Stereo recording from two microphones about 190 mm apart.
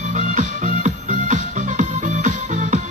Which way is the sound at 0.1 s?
40° right (ahead or behind).